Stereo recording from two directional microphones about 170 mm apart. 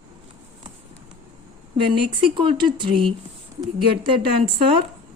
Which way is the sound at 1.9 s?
30° right (ahead or behind).